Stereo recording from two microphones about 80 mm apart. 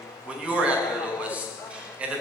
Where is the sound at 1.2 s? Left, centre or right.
Centre.